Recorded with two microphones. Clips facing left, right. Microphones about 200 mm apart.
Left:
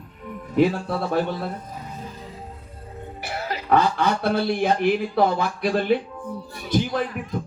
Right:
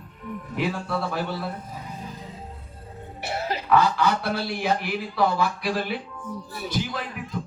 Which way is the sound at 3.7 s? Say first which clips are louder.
Left 1 dB; 50° left (ahead or behind).